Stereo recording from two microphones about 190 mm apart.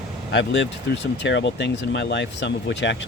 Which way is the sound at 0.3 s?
70° left (ahead or behind).